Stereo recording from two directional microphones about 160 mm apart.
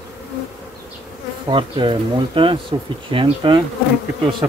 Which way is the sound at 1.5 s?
30° right (ahead or behind).